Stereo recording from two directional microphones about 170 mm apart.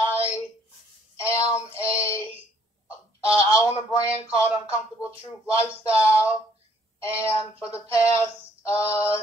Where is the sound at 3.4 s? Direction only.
20° left (ahead or behind).